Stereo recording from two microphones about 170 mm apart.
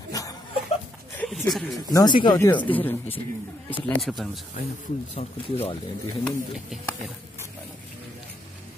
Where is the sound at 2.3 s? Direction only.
10° left (ahead or behind).